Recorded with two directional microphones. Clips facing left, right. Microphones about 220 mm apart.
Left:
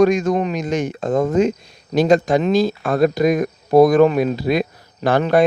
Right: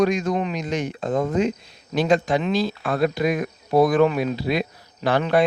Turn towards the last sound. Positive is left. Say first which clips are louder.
# left 4 dB
turn(degrees=45)  # may be behind; listen again after turning